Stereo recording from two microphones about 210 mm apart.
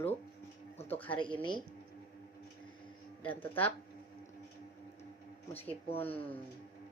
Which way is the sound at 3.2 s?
10° left (ahead or behind).